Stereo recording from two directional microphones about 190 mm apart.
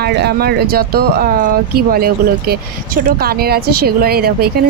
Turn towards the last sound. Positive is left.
turn(degrees=-55)  # may be behind; listen again after turning